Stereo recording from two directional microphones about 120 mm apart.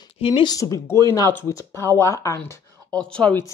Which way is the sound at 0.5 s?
30° left (ahead or behind).